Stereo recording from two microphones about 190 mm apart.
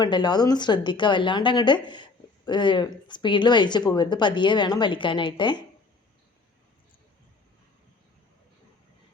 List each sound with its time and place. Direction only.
0.0 s speech: 25° left (ahead or behind)